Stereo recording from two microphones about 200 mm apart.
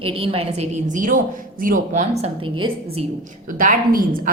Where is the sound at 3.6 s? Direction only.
40° right (ahead or behind).